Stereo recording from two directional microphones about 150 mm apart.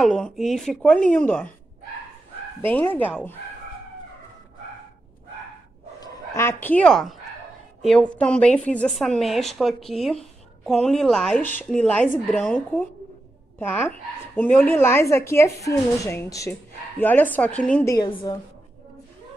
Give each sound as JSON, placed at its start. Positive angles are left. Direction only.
{"t": 0.0, "sound": "a woman's voice", "side_deg": 5}
{"t": 2.6, "sound": "speech", "side_deg": 10}
{"t": 5.9, "sound": "a woman's voice", "side_deg": 20}
{"t": 18.0, "sound": "a woman's voice", "side_deg": 30}